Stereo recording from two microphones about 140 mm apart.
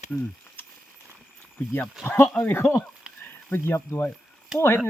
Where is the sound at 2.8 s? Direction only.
5° right (ahead or behind).